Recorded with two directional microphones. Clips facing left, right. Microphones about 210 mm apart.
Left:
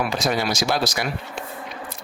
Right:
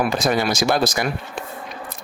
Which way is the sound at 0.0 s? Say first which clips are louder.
Right 3 dB; 50° right (ahead or behind).